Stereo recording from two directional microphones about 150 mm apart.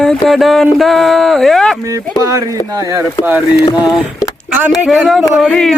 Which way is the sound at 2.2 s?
20° right (ahead or behind).